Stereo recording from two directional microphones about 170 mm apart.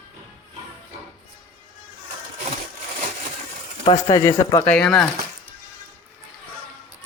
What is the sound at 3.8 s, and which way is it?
Speech, 25° left (ahead or behind).